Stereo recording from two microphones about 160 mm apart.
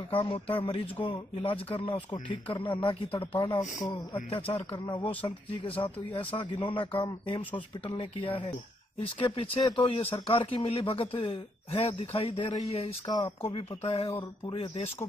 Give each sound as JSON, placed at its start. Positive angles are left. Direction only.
{"t": 0.1, "sound": "a man's voice", "side_deg": 35}